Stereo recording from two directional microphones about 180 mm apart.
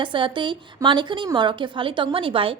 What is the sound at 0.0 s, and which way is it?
A woman's voice, 30° right (ahead or behind).